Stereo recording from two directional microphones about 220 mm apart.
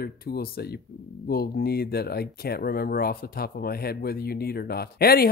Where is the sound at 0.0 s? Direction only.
45° left (ahead or behind).